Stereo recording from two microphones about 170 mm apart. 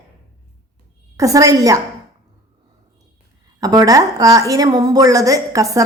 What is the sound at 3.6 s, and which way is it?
A woman's voice, 20° right (ahead or behind).